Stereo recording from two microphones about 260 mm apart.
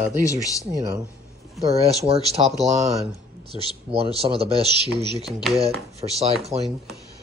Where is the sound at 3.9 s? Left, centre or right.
Right.